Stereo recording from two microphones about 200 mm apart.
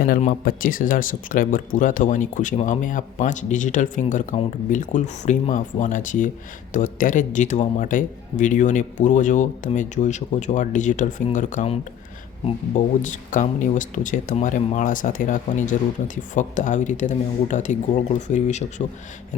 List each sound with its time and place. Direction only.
0.2 s speech: 40° left (ahead or behind)